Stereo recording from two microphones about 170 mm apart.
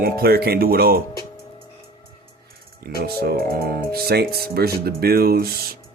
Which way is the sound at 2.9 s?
65° right (ahead or behind).